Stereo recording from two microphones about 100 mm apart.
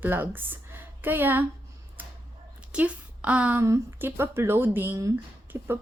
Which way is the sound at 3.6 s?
25° right (ahead or behind).